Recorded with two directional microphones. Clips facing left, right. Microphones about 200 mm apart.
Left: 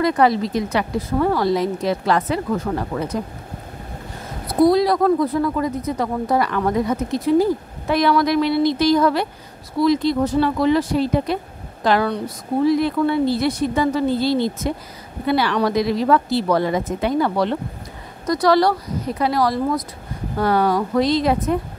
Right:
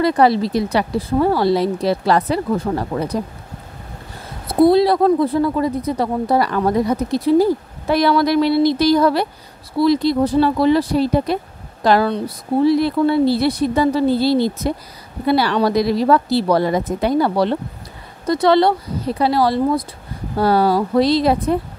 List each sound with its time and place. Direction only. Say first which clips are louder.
0.0 s speech: right 2 dB; 30° right (ahead or behind)
4.5 s speech: right 3 dB; 25° right (ahead or behind)